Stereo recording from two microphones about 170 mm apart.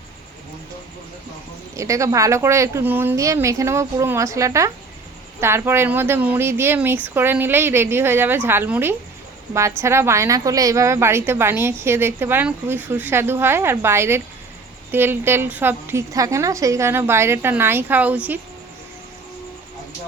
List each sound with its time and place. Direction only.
1.7 s a woman's voice: 20° right (ahead or behind)